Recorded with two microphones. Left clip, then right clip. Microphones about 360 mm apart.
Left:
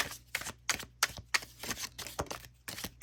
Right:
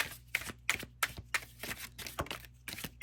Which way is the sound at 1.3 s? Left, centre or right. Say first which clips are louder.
Left 3 dB; centre.